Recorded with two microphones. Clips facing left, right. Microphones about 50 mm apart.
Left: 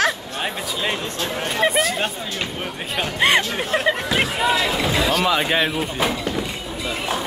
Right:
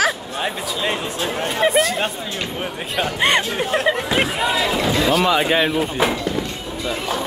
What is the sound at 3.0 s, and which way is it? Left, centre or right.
Speech, centre.